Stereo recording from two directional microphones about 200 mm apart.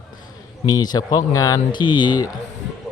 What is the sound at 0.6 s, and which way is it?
A man's voice, 20° left (ahead or behind).